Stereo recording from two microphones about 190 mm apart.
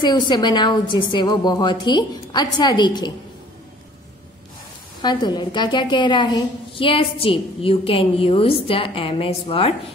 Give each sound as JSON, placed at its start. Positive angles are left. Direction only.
{"t": 0.0, "sound": "a woman's voice", "side_deg": 25}
{"t": 5.0, "sound": "a woman's voice", "side_deg": 20}